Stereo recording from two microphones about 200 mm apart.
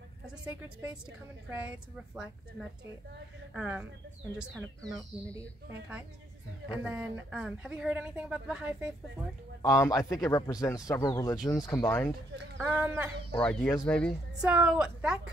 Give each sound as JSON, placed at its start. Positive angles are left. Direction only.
{"t": 0.5, "sound": "a woman's voice", "side_deg": -5}
{"t": 9.6, "sound": "speech", "side_deg": 15}
{"t": 12.5, "sound": "a woman's voice", "side_deg": -5}
{"t": 13.4, "sound": "a woman's voice", "side_deg": 5}
{"t": 14.4, "sound": "a woman's voice", "side_deg": -5}